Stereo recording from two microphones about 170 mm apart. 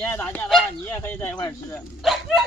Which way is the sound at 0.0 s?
10° left (ahead or behind).